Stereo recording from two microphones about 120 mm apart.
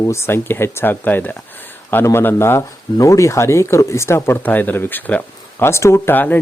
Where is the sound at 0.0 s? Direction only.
25° left (ahead or behind).